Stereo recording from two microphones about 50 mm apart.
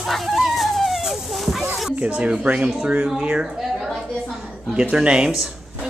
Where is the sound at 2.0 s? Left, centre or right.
Right.